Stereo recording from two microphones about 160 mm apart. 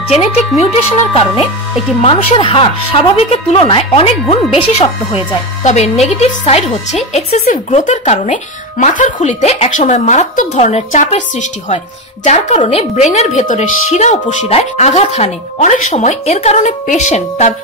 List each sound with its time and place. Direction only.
0.1 s a woman's voice: 40° left (ahead or behind)